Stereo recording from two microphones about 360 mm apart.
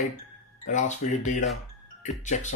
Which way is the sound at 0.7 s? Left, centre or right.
Left.